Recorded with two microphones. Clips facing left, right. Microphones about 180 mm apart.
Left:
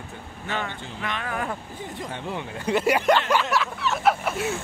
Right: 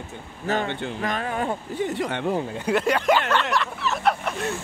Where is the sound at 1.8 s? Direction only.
75° right (ahead or behind).